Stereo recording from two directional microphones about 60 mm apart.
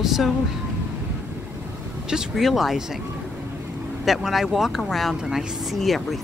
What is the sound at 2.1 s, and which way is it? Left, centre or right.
Speech, centre.